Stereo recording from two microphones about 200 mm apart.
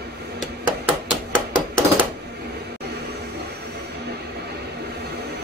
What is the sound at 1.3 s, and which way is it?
Hammer, 25° right (ahead or behind).